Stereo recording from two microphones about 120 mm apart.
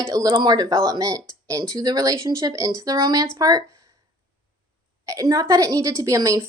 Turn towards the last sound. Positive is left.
turn(degrees=-25)  # may be behind; listen again after turning